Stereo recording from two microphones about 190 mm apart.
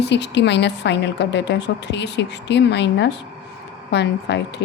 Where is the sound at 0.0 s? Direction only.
65° left (ahead or behind).